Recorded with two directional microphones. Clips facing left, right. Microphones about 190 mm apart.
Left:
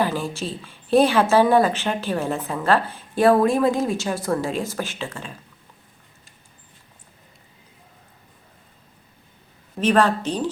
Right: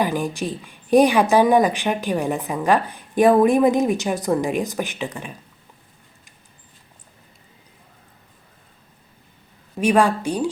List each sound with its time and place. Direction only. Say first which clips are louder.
0.0 s a woman's voice: right 2 dB; 15° right (ahead or behind)
9.7 s a woman's voice: right 1 dB; 10° right (ahead or behind)